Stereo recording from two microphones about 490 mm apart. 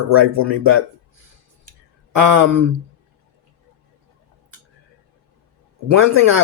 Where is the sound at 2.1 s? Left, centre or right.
Right.